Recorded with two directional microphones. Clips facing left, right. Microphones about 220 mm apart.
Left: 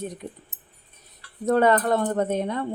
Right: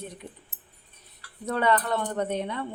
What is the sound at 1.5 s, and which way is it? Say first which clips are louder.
Speech: left 6 dB; 45° left (ahead or behind).